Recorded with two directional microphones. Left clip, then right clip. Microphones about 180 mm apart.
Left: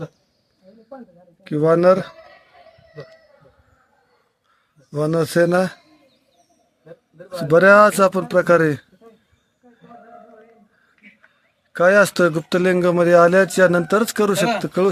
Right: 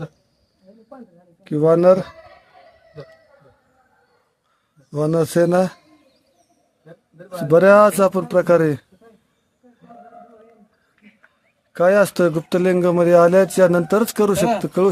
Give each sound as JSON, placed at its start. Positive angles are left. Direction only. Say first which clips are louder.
{"t": 1.5, "sound": "speech", "louder": "right 1 dB", "side_deg": -5}
{"t": 4.9, "sound": "speech", "louder": "right 1 dB", "side_deg": -10}
{"t": 7.3, "sound": "speech", "louder": "even", "side_deg": -5}
{"t": 9.6, "sound": "a sound", "louder": "left 1 dB", "side_deg": 35}
{"t": 11.7, "sound": "speech", "louder": "left 1 dB", "side_deg": 0}